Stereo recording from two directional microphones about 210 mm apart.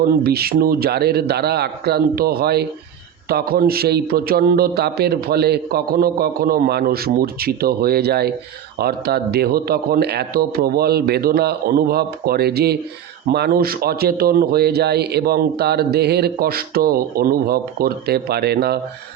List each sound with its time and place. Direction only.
0.0 s speech: 45° right (ahead or behind)